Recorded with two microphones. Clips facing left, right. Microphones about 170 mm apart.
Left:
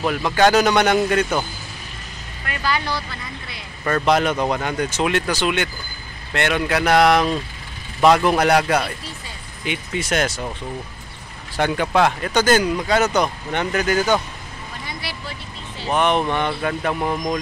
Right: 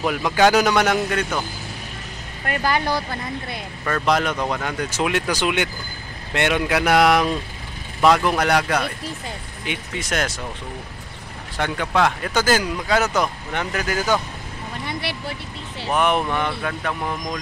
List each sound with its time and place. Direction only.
0.0 s a man's voice: 10° right (ahead or behind)
2.4 s speech: 45° right (ahead or behind)
3.8 s a man's voice: centre (ahead or behind)
8.0 s speech: centre (ahead or behind)
11.9 s speech: 5° left (ahead or behind)
14.9 s vehicle: 60° right (ahead or behind)
15.9 s speech: 5° right (ahead or behind)
16.6 s speech: 5° left (ahead or behind)